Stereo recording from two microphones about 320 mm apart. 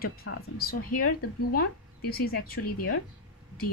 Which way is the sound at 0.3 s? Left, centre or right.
Left.